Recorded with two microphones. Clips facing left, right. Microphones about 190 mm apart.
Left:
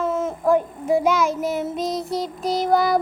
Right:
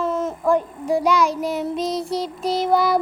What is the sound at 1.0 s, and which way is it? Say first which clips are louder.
Child singing: right 1 dB; 50° left (ahead or behind).